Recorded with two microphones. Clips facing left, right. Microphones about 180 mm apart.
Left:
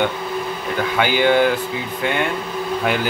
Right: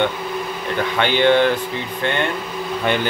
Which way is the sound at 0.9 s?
10° left (ahead or behind).